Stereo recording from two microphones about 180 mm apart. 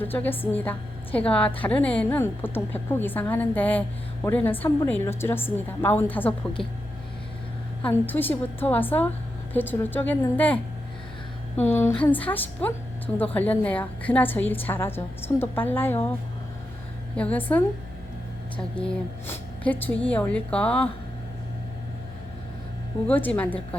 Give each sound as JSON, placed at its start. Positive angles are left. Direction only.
{"t": 0.0, "sound": "a woman's voice", "side_deg": 10}
{"t": 7.8, "sound": "a woman's voice", "side_deg": 10}
{"t": 17.2, "sound": "a woman's voice", "side_deg": 10}
{"t": 23.0, "sound": "a woman's voice", "side_deg": 10}